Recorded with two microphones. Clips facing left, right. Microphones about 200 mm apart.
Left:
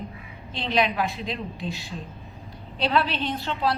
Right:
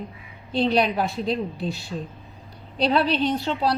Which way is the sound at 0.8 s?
40° right (ahead or behind).